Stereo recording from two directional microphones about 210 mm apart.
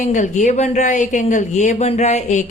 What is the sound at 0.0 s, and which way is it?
Speech, 35° left (ahead or behind).